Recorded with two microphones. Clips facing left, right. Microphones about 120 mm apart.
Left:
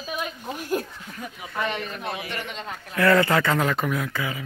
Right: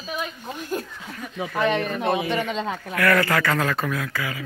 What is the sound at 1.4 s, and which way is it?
Speech, 75° right (ahead or behind).